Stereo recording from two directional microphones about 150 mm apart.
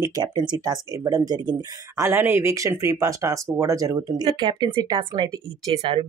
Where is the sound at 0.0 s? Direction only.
25° right (ahead or behind).